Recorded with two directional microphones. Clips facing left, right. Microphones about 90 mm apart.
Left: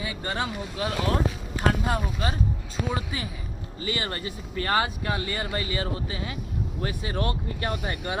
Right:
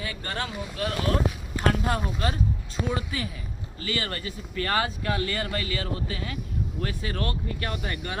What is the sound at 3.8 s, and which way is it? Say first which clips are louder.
Speech: left 1 dB; 20° left (ahead or behind).